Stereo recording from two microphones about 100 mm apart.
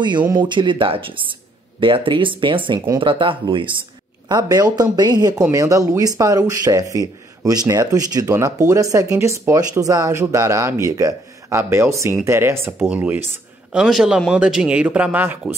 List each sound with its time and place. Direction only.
0.4 s speech: 55° right (ahead or behind)
4.3 s speech: 45° right (ahead or behind)
5.4 s speech: 35° right (ahead or behind); by 15.2 s 15° right (ahead or behind)